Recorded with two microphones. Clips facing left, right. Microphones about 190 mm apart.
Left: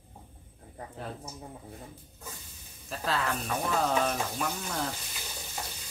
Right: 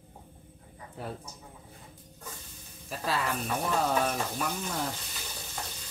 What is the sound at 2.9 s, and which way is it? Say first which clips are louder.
Speech: even; 10° right (ahead or behind).